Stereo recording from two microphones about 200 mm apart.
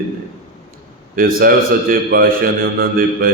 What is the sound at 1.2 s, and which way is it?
A man's voice, 45° right (ahead or behind).